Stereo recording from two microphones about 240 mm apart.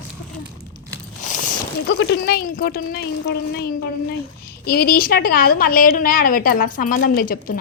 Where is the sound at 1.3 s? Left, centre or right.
Left.